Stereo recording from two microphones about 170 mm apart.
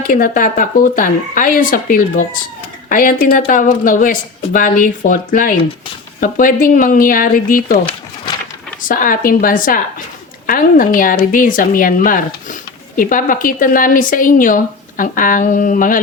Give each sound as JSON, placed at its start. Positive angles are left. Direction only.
{"t": 0.0, "sound": "speech", "side_deg": 55}
{"t": 8.9, "sound": "speech", "side_deg": 55}